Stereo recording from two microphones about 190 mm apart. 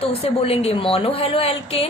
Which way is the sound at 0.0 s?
30° left (ahead or behind).